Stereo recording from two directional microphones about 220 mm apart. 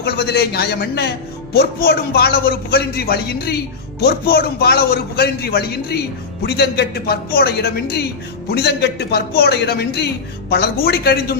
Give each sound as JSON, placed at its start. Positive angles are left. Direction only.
{"t": 0.0, "sound": "a man's voice", "side_deg": 45}